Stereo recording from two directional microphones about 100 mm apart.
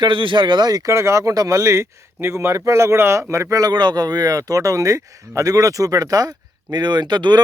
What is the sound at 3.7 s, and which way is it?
Speech, 50° right (ahead or behind).